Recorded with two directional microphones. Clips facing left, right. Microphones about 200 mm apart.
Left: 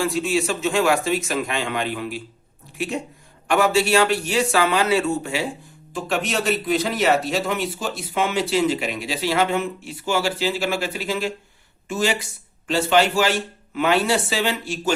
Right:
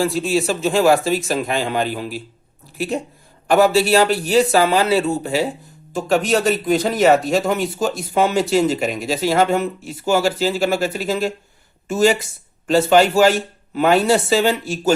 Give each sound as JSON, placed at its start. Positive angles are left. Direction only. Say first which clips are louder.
{"t": 0.0, "sound": "a man's voice", "louder": "right 3 dB", "side_deg": -35}